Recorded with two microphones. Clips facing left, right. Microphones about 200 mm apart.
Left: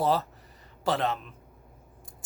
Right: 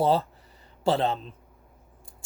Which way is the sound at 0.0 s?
30° right (ahead or behind).